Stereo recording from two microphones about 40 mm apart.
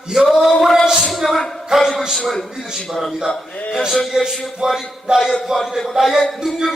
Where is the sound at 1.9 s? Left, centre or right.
Centre.